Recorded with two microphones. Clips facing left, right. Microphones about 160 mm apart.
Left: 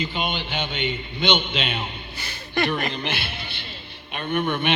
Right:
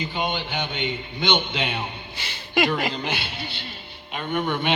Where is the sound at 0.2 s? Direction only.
15° right (ahead or behind).